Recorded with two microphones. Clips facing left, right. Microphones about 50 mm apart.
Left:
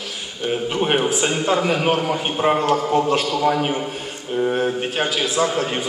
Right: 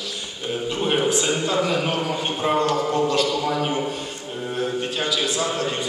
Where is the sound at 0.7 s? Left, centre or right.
Left.